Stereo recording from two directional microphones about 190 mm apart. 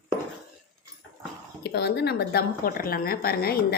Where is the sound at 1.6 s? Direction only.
60° left (ahead or behind).